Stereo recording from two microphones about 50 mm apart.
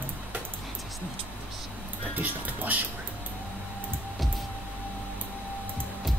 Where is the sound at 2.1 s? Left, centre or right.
Right.